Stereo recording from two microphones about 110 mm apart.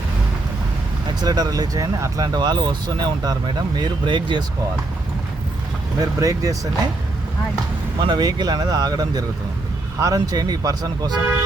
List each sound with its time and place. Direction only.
1.2 s speech: 35° right (ahead or behind)
6.0 s speech: 30° right (ahead or behind)
7.9 s speech: 45° right (ahead or behind)